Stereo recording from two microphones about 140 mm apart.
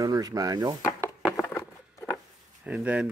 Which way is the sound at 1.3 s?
20° left (ahead or behind).